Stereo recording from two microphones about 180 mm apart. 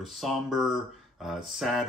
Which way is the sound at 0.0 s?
Centre (ahead or behind).